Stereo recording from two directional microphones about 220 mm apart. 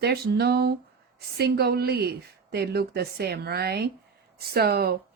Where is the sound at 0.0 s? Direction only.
45° right (ahead or behind).